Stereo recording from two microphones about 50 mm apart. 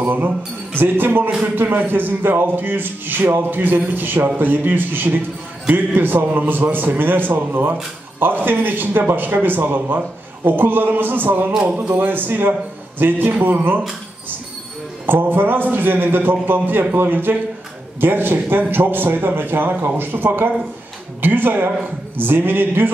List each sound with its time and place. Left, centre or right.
0.0 s a man's voice: right
11.6 s speech: right
11.9 s speech: right
15.0 s a man's voice: right